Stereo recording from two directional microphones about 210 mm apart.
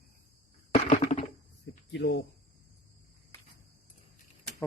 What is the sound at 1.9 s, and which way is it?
Speech, 55° left (ahead or behind).